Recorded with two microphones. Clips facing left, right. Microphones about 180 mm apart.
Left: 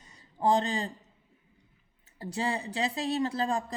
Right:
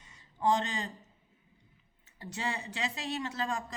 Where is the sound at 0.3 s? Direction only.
35° left (ahead or behind).